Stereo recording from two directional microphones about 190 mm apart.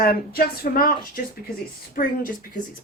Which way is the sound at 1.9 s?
50° left (ahead or behind).